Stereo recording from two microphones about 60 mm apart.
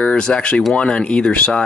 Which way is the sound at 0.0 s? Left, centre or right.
Centre.